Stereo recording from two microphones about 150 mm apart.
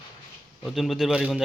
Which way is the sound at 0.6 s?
Centre (ahead or behind).